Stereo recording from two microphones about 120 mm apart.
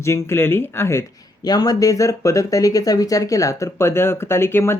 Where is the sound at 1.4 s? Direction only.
35° left (ahead or behind).